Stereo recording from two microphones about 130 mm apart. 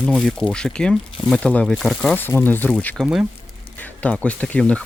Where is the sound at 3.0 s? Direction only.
5° right (ahead or behind).